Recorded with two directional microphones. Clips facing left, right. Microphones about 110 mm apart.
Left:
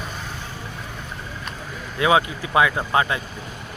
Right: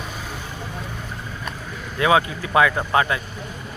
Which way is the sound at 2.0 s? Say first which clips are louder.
Even; 20° left (ahead or behind).